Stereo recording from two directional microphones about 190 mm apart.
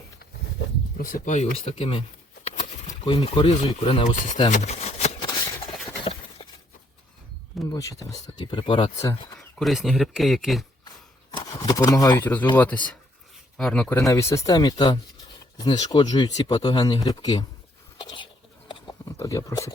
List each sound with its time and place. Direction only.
0.9 s speech: 45° left (ahead or behind); by 4.0 s 25° left (ahead or behind)
4.1 s speech: 40° left (ahead or behind)
4.4 s a sound: 35° left (ahead or behind)
7.7 s speech: 15° left (ahead or behind)
9.6 s speech: centre (ahead or behind)
10.8 s a sound: 20° left (ahead or behind)
12.5 s speech: 10° left (ahead or behind)
14.0 s speech: 15° left (ahead or behind)
17.9 s whispering: 25° left (ahead or behind)
18.7 s horse: 25° left (ahead or behind)
19.1 s speech: 15° left (ahead or behind)